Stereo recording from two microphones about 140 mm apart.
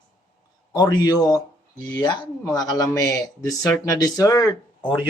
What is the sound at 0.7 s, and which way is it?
Speech, 30° left (ahead or behind).